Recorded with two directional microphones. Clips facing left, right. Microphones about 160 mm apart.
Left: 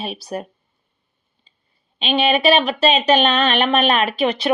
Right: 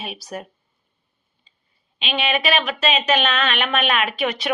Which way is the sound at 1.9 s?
35° left (ahead or behind).